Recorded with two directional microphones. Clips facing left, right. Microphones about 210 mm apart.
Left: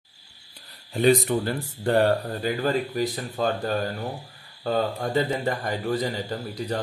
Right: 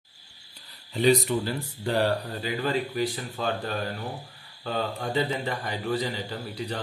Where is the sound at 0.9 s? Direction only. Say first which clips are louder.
Left 2 dB; 50° left (ahead or behind).